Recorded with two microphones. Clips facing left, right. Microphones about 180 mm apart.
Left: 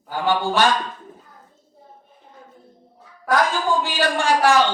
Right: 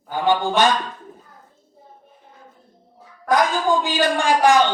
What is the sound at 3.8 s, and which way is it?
Speech, 15° right (ahead or behind).